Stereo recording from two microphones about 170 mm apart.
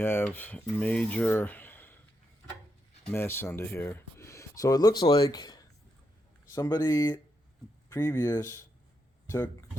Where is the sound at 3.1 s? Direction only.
15° left (ahead or behind).